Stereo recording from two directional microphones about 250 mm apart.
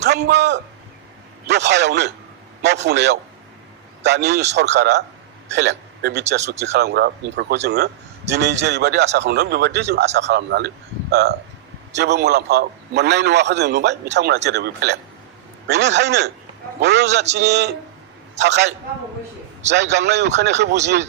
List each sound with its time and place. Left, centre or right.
0.0 s a man's voice: right
19.7 s a man's voice: right